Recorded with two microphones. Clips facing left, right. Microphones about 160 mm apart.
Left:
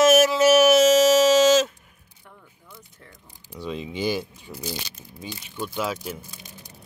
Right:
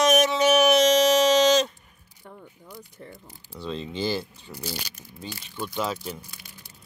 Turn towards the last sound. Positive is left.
turn(degrees=5)  # may be behind; listen again after turning